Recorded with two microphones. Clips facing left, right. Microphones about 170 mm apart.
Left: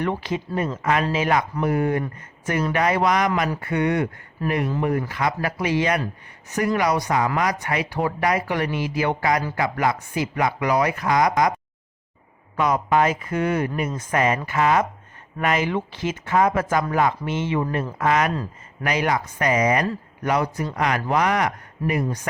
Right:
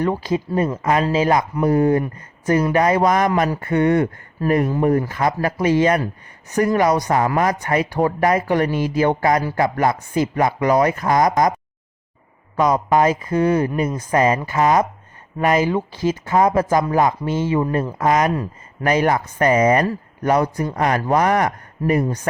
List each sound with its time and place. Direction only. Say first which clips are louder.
0.0 s speech: right 5 dB; 40° right (ahead or behind)
12.5 s speech: right 3 dB; 40° right (ahead or behind)
18.9 s speech: right 5 dB; 50° right (ahead or behind)